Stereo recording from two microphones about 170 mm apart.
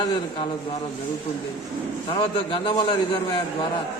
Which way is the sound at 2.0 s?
30° left (ahead or behind).